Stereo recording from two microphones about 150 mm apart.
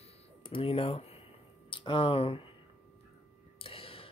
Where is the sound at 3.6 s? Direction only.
40° left (ahead or behind).